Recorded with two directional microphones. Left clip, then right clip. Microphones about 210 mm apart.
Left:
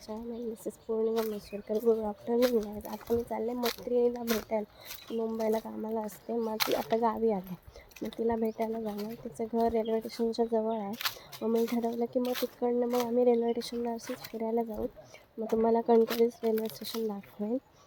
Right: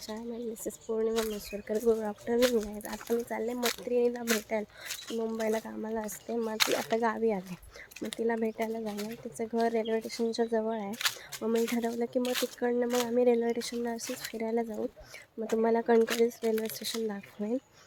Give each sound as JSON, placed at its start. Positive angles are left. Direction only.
{"t": 0.9, "sound": "speech", "side_deg": -5}
{"t": 2.2, "sound": "speech", "side_deg": -5}